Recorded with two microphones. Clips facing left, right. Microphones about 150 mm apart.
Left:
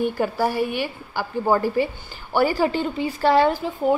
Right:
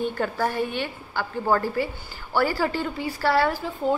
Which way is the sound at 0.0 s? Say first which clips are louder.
Left 3 dB; 10° left (ahead or behind).